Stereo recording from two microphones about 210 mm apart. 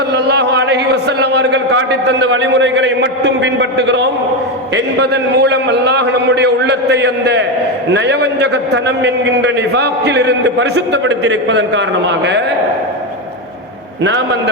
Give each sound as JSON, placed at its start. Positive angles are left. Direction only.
{"t": 0.1, "sound": "a man's voice", "side_deg": -55}
{"t": 14.0, "sound": "a man's voice", "side_deg": -55}